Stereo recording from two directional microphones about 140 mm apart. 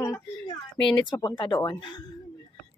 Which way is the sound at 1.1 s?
30° left (ahead or behind).